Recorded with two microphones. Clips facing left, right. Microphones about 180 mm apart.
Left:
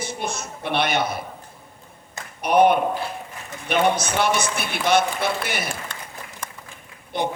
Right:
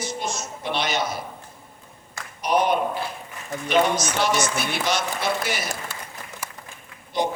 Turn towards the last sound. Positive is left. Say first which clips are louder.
# right 1 dB
turn(degrees=60)  # may be behind; listen again after turning